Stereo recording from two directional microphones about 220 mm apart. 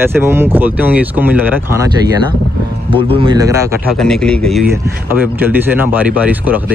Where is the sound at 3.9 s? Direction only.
5° left (ahead or behind).